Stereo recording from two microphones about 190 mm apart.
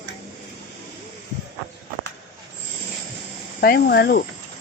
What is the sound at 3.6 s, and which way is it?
Speech, 55° left (ahead or behind).